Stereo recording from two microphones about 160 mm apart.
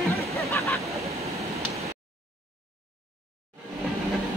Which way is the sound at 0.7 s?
Centre (ahead or behind).